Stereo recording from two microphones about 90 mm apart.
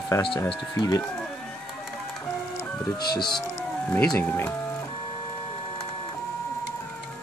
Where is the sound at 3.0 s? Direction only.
55° left (ahead or behind).